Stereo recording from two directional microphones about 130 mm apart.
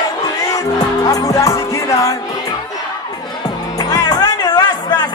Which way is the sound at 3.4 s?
30° left (ahead or behind).